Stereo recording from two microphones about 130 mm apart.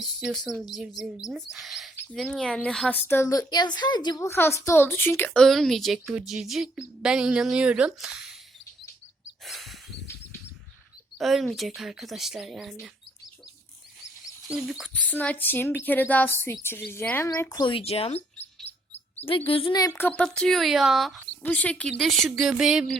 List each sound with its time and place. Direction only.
0.0 s a woman's voice: 5° right (ahead or behind); by 3.2 s 15° left (ahead or behind)
3.2 s speech: 30° left (ahead or behind)
4.3 s speech: 20° left (ahead or behind); by 8.4 s 5° right (ahead or behind)
9.4 s a sound: centre (ahead or behind)
11.2 s speech: centre (ahead or behind)
14.4 s speech: 5° right (ahead or behind)
15.0 s a woman's voice: 10° left (ahead or behind); by 18.2 s 50° left (ahead or behind)
18.6 s chirp: 50° left (ahead or behind)
19.5 s a woman's voice: 45° left (ahead or behind)
19.7 s speech: 30° left (ahead or behind)
20.0 s speech: 15° left (ahead or behind)
21.4 s speech: 10° left (ahead or behind)